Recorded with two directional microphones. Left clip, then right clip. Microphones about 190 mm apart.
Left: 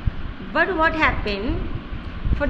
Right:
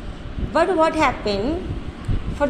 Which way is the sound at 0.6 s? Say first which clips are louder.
Right 2 dB; 20° right (ahead or behind).